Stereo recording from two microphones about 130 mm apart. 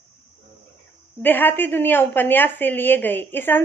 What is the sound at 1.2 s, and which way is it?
Speech, 15° left (ahead or behind).